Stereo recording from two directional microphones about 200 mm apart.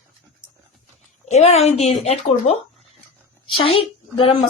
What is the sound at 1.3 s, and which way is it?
Speech, 35° left (ahead or behind).